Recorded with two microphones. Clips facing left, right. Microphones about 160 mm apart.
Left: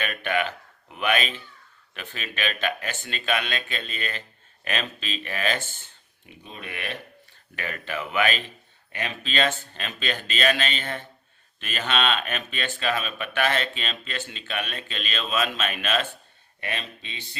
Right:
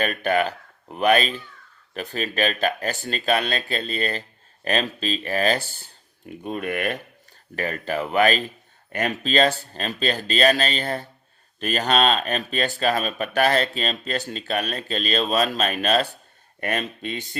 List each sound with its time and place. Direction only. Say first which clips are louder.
0.0 s speech: right 5 dB; 40° right (ahead or behind)
6.2 s speech: right 12 dB; 50° right (ahead or behind)